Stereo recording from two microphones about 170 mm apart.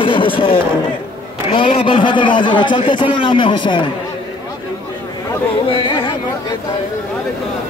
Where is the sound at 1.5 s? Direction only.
30° left (ahead or behind).